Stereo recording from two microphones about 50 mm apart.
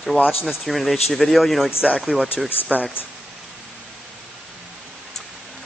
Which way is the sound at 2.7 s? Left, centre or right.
Left.